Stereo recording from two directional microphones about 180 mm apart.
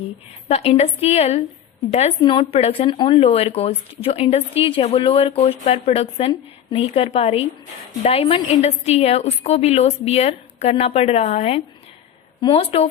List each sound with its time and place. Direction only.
0.4 s speech: 35° left (ahead or behind)